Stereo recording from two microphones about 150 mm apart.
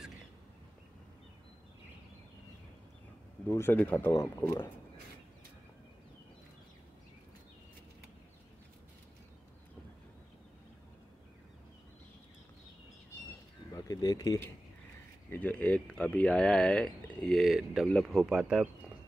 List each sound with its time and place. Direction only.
3.4 s speech: 15° left (ahead or behind)
4.1 s speech: 20° left (ahead or behind)
13.7 s speech: 25° left (ahead or behind)
15.2 s speech: 10° left (ahead or behind); by 18.7 s 5° right (ahead or behind)